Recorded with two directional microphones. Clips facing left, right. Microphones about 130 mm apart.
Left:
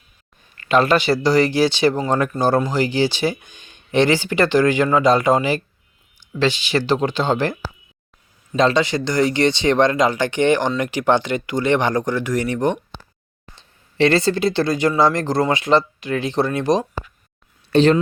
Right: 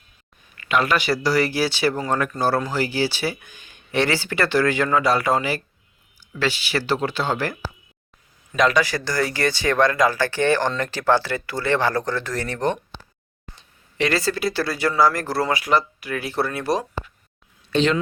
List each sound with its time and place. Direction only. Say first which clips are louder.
0.5 s speech: left 5 dB; 35° left (ahead or behind); by 12.8 s 15° left (ahead or behind)
13.6 s speech: left 7 dB; 25° left (ahead or behind)
17.7 s speech: left 6 dB; 40° left (ahead or behind)